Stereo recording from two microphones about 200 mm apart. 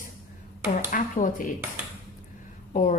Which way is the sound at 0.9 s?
40° left (ahead or behind).